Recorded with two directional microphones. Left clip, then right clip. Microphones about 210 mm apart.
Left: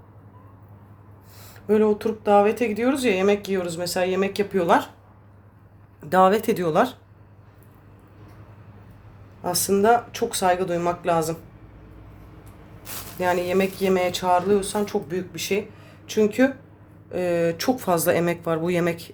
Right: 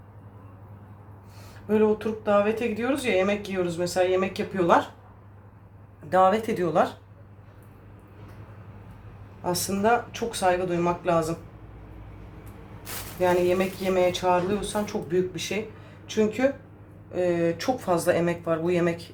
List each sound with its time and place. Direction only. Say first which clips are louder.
1.6 s speech: left 3 dB; 50° left (ahead or behind)
6.1 s speech: left 3 dB; 50° left (ahead or behind)
9.4 s speech: left 5 dB; 50° left (ahead or behind)
13.1 s speech: even; 50° left (ahead or behind)